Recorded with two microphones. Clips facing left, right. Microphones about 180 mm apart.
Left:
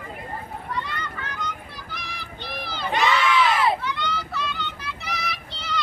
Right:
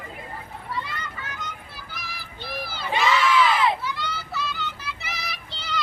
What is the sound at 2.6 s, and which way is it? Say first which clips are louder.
Crowd: left 1 dB; 5° right (ahead or behind).